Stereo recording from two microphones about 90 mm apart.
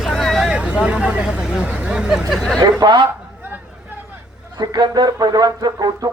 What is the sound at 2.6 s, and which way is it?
Speech, 55° right (ahead or behind).